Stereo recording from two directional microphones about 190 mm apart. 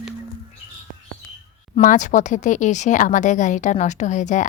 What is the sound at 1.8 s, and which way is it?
A woman's voice, 40° left (ahead or behind).